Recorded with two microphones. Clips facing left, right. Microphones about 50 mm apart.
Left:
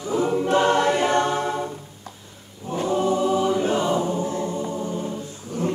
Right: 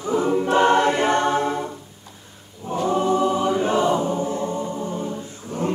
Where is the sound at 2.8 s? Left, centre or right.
Right.